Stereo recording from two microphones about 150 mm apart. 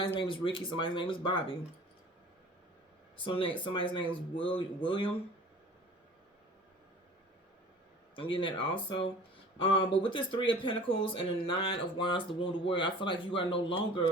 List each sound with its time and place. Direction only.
0.0 s speech: 35° left (ahead or behind)
3.2 s speech: 35° left (ahead or behind)
8.1 s speech: 35° left (ahead or behind)